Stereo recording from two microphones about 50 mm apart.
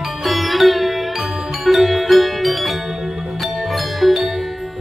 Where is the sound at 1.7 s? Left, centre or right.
Centre.